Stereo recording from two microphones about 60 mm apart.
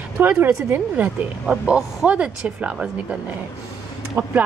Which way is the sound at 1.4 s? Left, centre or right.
Centre.